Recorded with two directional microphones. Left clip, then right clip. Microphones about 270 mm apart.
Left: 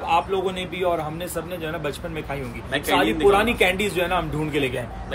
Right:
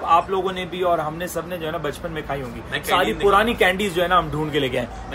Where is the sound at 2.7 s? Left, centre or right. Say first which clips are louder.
Right 1 dB; centre.